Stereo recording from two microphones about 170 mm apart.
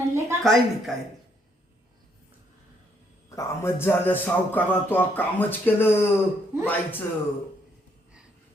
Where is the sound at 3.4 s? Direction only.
15° left (ahead or behind).